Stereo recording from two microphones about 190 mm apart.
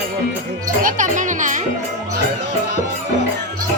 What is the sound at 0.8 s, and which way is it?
Music, 45° right (ahead or behind).